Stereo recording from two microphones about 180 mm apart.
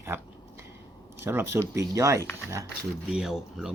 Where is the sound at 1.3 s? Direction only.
15° right (ahead or behind).